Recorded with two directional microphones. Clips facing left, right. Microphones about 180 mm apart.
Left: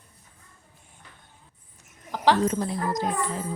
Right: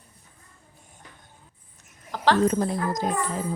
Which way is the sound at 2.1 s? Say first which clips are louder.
Even; 15° left (ahead or behind).